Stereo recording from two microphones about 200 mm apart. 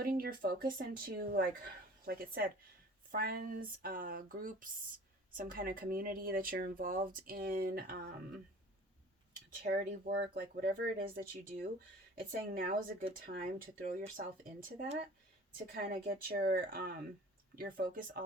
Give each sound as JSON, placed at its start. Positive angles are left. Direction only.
{"t": 0.0, "sound": "speech", "side_deg": -45}
{"t": 9.6, "sound": "speech", "side_deg": -50}
{"t": 10.4, "sound": "speech", "side_deg": -45}
{"t": 15.5, "sound": "speech", "side_deg": -45}